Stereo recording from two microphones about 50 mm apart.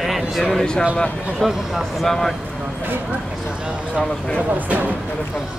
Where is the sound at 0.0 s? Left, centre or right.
Centre.